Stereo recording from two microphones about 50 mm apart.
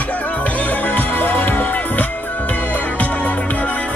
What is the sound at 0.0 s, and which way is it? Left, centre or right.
Music, left.